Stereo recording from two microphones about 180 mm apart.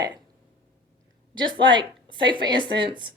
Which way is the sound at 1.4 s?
25° right (ahead or behind).